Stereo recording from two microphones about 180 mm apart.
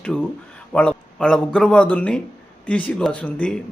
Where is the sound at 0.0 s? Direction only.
5° left (ahead or behind).